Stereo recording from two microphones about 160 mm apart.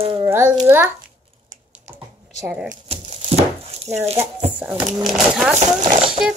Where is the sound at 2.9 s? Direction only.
40° right (ahead or behind).